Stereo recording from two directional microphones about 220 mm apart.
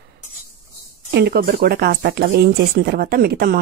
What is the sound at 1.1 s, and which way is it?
Speech, 45° right (ahead or behind).